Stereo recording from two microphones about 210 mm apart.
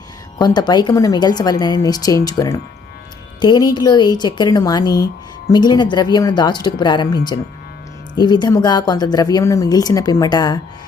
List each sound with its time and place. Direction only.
0.3 s speech: 20° left (ahead or behind)